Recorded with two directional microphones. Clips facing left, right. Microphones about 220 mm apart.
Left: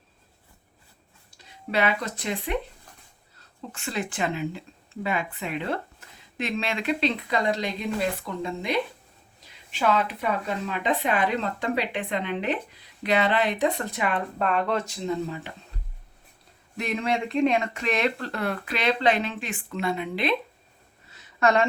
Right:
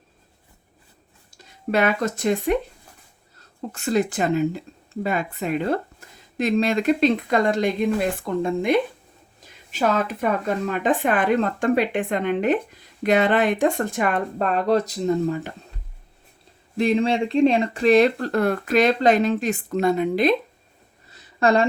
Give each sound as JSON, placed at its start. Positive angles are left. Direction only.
{"t": 1.3, "sound": "speech", "side_deg": -45}
{"t": 3.7, "sound": "speech", "side_deg": -40}
{"t": 16.7, "sound": "speech", "side_deg": -30}
{"t": 21.1, "sound": "a sound", "side_deg": -35}